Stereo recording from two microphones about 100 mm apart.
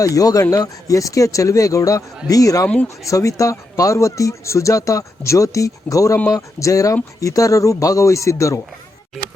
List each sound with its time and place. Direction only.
0.0 s speech: 35° left (ahead or behind)